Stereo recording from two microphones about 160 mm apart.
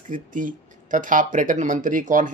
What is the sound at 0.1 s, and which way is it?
Speech, 55° right (ahead or behind).